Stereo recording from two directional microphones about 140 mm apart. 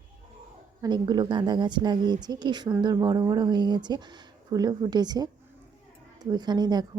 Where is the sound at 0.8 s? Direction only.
30° right (ahead or behind).